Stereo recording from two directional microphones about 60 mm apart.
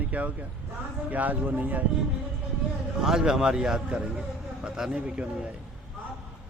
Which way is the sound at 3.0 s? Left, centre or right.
Centre.